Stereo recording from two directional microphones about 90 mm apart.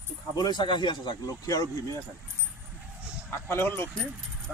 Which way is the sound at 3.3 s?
30° left (ahead or behind).